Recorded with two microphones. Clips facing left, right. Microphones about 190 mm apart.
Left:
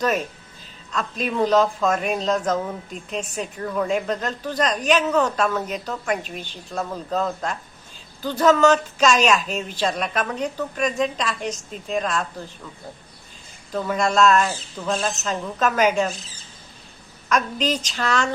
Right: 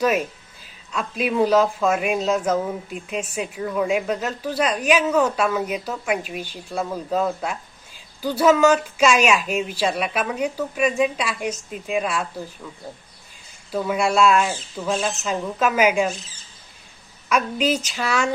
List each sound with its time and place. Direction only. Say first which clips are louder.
0.0 s speech: right 2 dB; 10° right (ahead or behind)
13.7 s speech: right 1 dB; 10° right (ahead or behind)
17.2 s speech: right 1 dB; 10° right (ahead or behind)